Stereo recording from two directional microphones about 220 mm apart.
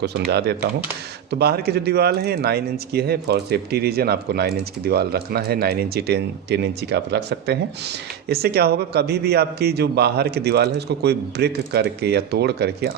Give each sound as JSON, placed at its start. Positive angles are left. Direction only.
{"t": 0.0, "sound": "speech", "side_deg": -45}